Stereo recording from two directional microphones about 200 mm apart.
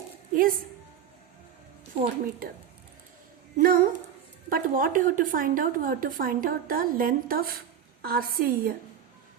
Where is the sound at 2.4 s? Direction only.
45° right (ahead or behind).